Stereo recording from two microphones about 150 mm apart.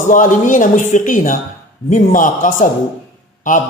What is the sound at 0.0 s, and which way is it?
A man's voice, 60° left (ahead or behind).